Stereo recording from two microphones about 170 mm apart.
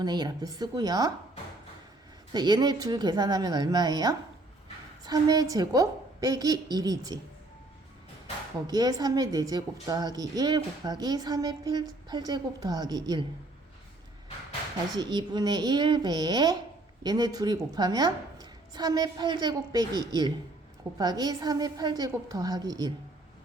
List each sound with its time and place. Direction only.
0.0 s speech: 25° right (ahead or behind)
2.3 s speech: 25° right (ahead or behind)
8.6 s speech: 25° right (ahead or behind)
14.9 s speech: 25° right (ahead or behind)